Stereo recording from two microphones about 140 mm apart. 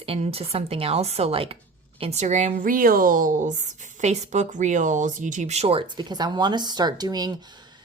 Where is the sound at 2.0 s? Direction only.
50° right (ahead or behind).